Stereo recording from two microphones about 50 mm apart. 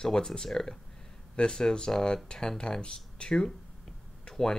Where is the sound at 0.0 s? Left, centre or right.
Centre.